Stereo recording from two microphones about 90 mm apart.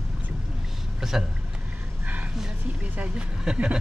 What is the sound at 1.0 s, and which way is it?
Speech, 5° right (ahead or behind).